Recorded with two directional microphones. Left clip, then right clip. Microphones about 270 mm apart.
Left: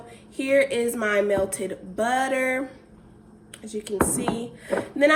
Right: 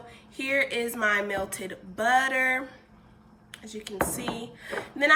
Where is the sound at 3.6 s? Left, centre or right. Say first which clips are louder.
Left 5 dB; left.